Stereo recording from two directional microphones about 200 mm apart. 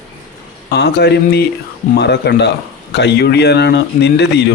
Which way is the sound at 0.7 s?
55° left (ahead or behind).